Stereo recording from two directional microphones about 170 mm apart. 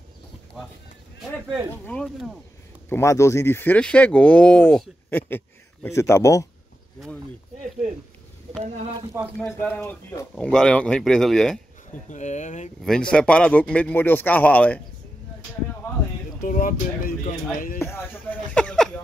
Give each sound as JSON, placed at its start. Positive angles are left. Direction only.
{"t": 1.9, "sound": "speech", "side_deg": 5}
{"t": 2.9, "sound": "speech", "side_deg": 15}
{"t": 8.6, "sound": "speech", "side_deg": -40}
{"t": 10.3, "sound": "speech", "side_deg": 5}
{"t": 12.1, "sound": "speech", "side_deg": 45}
{"t": 12.8, "sound": "speech", "side_deg": 5}
{"t": 16.4, "sound": "speech", "side_deg": 55}
{"t": 17.7, "sound": "a sound", "side_deg": 15}